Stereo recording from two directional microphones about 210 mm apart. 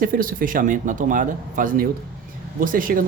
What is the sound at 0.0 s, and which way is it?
Speech, 45° right (ahead or behind).